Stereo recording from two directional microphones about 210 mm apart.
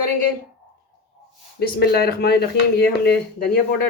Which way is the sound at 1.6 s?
50° left (ahead or behind).